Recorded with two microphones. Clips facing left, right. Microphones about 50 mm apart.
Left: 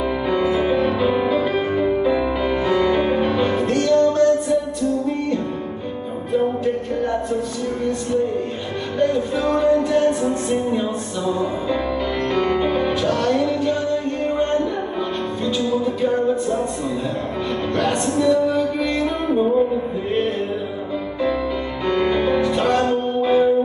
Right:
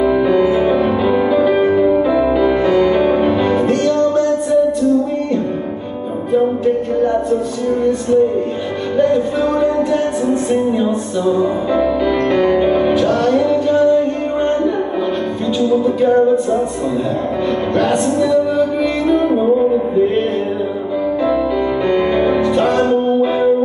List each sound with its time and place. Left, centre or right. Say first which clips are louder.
0.5 s music: right 5 dB; centre
8.9 s music: right 5 dB; centre
12.3 s music: right 5 dB; centre
17.7 s music: right 5 dB; centre
22.0 s music: right 4 dB; centre
22.4 s music: right 4 dB; centre